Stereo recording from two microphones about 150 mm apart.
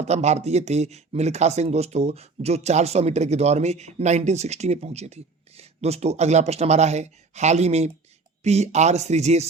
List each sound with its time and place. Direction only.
0.0 s speech: 50° right (ahead or behind)